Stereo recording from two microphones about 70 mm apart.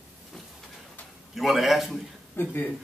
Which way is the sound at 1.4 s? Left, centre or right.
Centre.